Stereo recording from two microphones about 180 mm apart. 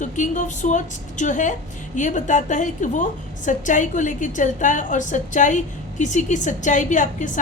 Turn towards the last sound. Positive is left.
turn(degrees=45)  # may be behind; listen again after turning